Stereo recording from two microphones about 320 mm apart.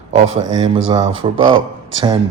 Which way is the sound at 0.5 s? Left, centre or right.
Centre.